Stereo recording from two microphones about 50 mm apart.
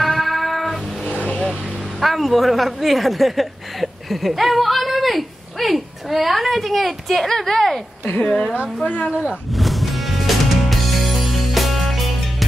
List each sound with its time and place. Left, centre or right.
0.0 s music: centre
1.3 s vehicle: centre
2.0 s speech: centre
8.8 s speech: left
9.5 s music: centre